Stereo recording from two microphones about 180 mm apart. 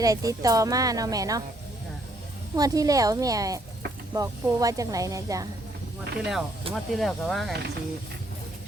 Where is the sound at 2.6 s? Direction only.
20° right (ahead or behind).